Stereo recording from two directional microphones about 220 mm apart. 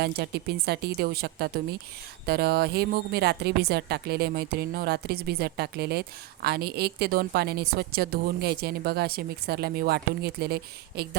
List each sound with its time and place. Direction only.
0.0 s speech: 45° right (ahead or behind)